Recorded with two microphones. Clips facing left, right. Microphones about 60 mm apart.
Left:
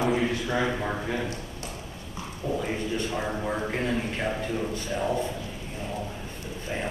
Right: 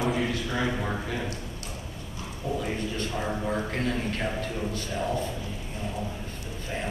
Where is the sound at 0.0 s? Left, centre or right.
Centre.